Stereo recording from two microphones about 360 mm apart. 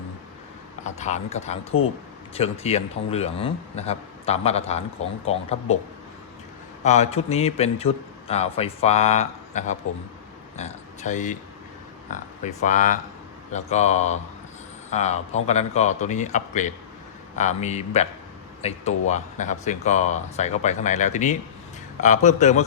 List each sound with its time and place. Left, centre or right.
0.9 s speech: centre
6.8 s speech: centre
10.6 s a sound: centre
12.1 s speech: centre